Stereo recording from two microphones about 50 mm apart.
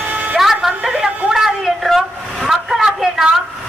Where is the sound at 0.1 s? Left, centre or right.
Right.